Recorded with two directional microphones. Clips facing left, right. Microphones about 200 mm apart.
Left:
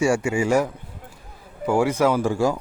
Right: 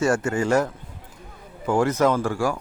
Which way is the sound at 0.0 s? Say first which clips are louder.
Left 1 dB; 10° left (ahead or behind).